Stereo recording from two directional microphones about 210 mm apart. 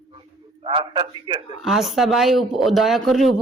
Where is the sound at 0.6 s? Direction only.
25° right (ahead or behind).